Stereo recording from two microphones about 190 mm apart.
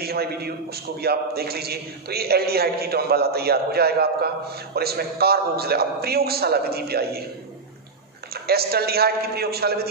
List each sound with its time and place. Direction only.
0.0 s a man's voice: 55° right (ahead or behind)
8.3 s a man's voice: 55° right (ahead or behind)